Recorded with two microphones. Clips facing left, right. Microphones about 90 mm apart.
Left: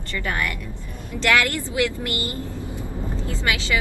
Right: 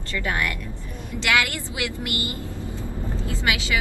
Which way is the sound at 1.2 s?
15° right (ahead or behind).